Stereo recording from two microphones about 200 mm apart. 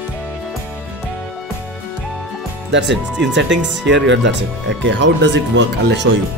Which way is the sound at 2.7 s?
60° right (ahead or behind).